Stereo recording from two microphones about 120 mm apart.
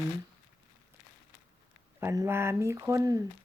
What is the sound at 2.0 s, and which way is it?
Speech, 20° right (ahead or behind).